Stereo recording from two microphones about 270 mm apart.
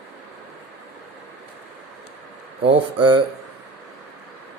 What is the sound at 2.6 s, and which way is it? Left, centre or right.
Speech, centre.